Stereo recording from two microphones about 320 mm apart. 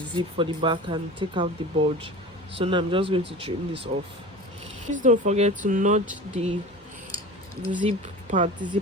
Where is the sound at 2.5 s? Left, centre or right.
Centre.